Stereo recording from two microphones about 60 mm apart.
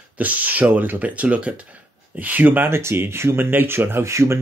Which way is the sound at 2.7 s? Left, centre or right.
Right.